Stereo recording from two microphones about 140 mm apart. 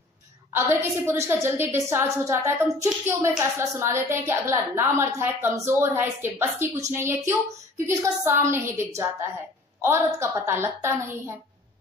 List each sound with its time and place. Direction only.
0.5 s a woman's voice: 15° right (ahead or behind)